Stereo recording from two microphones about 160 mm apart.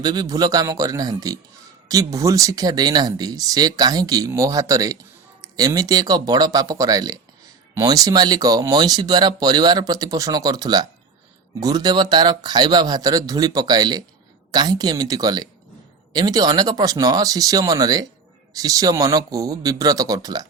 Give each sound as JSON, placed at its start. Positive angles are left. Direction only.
{"t": 0.0, "sound": "speech", "side_deg": -25}